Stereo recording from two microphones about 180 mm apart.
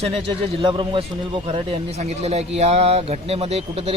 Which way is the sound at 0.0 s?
35° right (ahead or behind).